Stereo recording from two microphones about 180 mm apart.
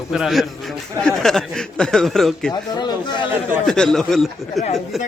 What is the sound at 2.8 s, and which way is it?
Speech, 25° left (ahead or behind).